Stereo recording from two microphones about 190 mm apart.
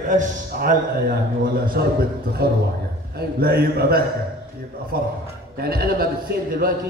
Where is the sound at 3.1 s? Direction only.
55° right (ahead or behind).